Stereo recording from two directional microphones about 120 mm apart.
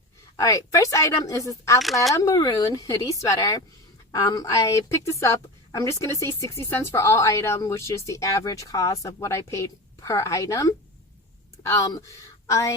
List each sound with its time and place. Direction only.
0.3 s a woman's voice: 25° left (ahead or behind)